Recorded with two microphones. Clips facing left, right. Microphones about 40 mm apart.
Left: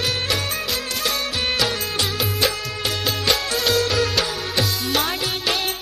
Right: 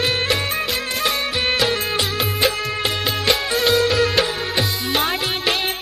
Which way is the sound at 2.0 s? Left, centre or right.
Centre.